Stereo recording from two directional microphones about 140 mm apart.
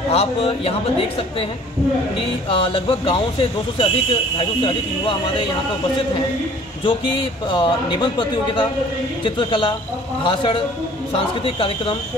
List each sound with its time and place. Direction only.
0.1 s speech: 45° left (ahead or behind)
2.5 s speech: 40° left (ahead or behind)
6.8 s speech: 35° left (ahead or behind)